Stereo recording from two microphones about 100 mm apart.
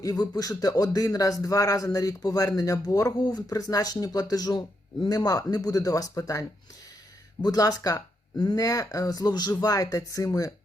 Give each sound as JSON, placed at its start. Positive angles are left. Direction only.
{"t": 0.0, "sound": "speech", "side_deg": 40}
{"t": 7.4, "sound": "speech", "side_deg": 40}